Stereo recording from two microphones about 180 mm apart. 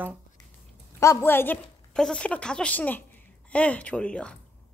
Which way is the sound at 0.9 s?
15° left (ahead or behind).